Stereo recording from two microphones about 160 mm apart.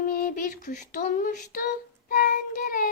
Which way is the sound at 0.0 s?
60° left (ahead or behind).